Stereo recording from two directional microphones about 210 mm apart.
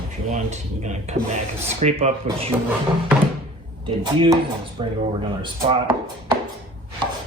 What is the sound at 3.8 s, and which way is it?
Chopping, 25° right (ahead or behind).